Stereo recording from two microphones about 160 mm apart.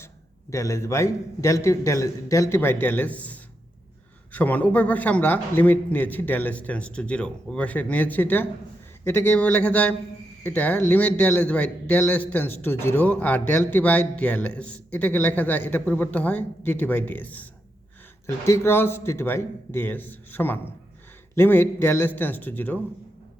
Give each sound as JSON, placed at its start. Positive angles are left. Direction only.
{"t": 0.5, "sound": "a man's voice", "side_deg": 20}